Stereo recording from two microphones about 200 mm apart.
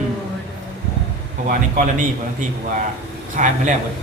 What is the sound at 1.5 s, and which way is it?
Speech, 40° right (ahead or behind).